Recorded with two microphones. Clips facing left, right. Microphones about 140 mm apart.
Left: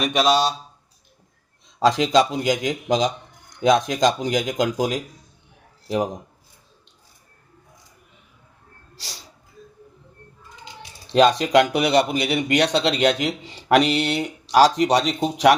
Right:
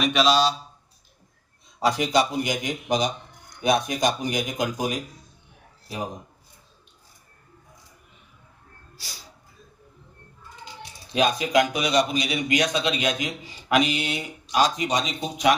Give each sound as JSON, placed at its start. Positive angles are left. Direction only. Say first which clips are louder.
{"t": 0.0, "sound": "speech", "louder": "left 1 dB", "side_deg": 50}
{"t": 1.8, "sound": "speech", "louder": "left 4 dB", "side_deg": 90}
{"t": 11.1, "sound": "speech", "louder": "left 6 dB", "side_deg": 80}